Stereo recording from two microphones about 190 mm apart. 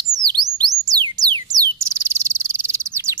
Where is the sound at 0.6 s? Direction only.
20° right (ahead or behind).